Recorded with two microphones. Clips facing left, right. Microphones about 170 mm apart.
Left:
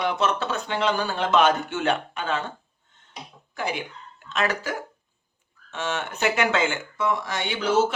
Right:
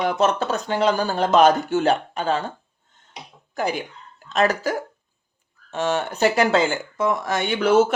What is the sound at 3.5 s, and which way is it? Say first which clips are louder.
Speech: right 4 dB; 40° right (ahead or behind).